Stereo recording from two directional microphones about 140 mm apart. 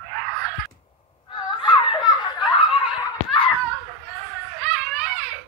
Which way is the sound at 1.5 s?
35° left (ahead or behind).